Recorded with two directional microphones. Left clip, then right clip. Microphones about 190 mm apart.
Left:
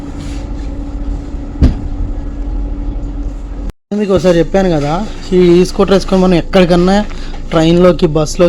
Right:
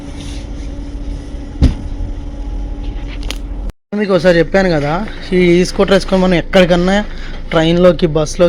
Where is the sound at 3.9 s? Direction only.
5° left (ahead or behind).